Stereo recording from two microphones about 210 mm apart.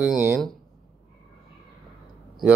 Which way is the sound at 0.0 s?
5° right (ahead or behind).